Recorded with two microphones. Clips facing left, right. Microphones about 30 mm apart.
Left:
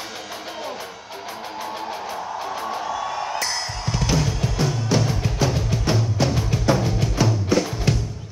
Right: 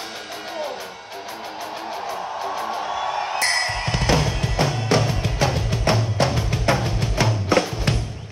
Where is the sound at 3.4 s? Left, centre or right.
Right.